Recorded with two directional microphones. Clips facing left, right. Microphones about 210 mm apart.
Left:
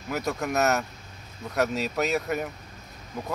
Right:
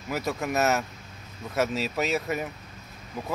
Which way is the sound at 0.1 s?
Centre (ahead or behind).